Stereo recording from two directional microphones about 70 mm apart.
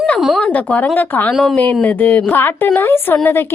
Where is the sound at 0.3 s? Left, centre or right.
Centre.